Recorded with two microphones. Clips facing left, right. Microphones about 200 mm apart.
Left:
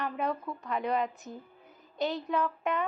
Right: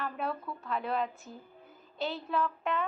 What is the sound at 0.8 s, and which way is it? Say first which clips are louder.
Speech: left 3 dB; 5° right (ahead or behind).